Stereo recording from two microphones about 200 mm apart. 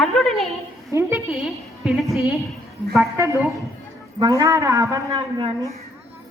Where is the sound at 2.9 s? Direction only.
15° right (ahead or behind).